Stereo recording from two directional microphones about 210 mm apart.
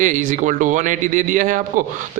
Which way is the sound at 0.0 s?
40° right (ahead or behind).